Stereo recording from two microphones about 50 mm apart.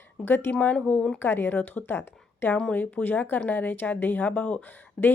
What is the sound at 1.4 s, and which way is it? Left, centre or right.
Speech, left.